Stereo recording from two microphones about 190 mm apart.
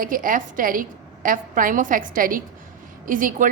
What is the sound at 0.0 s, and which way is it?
A woman's voice, 45° right (ahead or behind).